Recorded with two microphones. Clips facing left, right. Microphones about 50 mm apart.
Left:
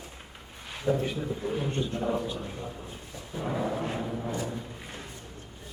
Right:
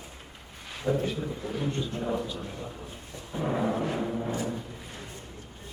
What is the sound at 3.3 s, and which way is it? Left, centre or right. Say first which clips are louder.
Music: right 3 dB; centre.